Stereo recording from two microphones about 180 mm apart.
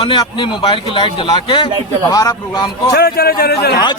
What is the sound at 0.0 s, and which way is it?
A man's voice, 25° left (ahead or behind).